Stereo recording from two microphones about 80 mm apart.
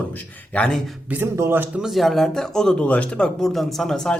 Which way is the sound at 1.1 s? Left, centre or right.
Right.